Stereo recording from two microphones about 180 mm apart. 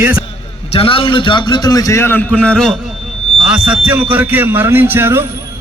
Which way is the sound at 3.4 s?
5° right (ahead or behind).